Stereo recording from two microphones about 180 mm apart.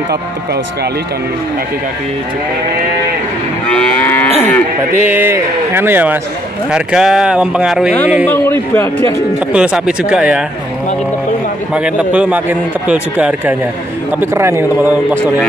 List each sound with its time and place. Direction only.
3.7 s livestock: 10° left (ahead or behind)
4.3 s speech: 40° right (ahead or behind)
5.0 s a man's voice: 10° right (ahead or behind)
8.3 s a man's voice: 15° left (ahead or behind)
9.5 s a man's voice: 5° right (ahead or behind)
11.7 s a man's voice: 5° right (ahead or behind)